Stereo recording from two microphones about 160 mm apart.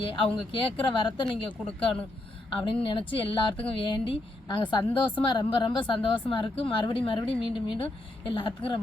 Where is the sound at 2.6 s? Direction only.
35° left (ahead or behind).